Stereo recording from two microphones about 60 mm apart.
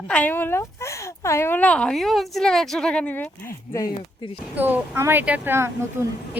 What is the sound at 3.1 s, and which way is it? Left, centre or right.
Speech, left.